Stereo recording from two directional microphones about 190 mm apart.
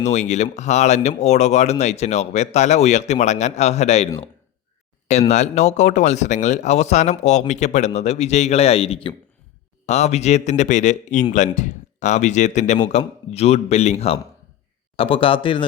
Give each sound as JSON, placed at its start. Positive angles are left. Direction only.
{"t": 0.0, "sound": "speech", "side_deg": 35}
{"t": 5.3, "sound": "speech", "side_deg": 35}